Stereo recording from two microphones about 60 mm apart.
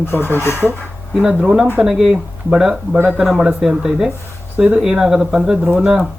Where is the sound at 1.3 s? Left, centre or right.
Centre.